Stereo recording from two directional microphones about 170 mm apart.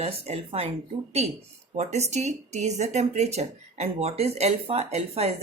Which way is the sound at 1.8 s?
40° right (ahead or behind).